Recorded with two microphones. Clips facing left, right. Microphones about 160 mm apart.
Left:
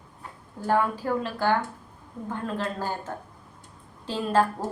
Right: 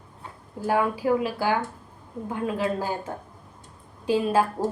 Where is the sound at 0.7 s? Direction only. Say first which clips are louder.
Right 2 dB; 10° right (ahead or behind).